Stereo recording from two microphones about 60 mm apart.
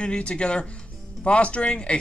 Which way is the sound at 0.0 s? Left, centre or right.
Centre.